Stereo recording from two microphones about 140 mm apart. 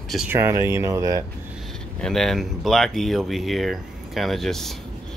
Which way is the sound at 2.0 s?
5° left (ahead or behind).